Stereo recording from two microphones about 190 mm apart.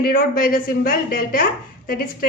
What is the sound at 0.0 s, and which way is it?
A woman's voice, 50° left (ahead or behind).